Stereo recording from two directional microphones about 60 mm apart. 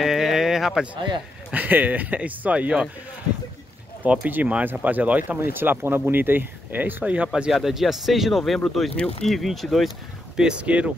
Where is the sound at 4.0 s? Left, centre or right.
Centre.